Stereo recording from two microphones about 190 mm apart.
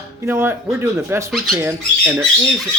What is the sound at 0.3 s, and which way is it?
Speech, 10° right (ahead or behind).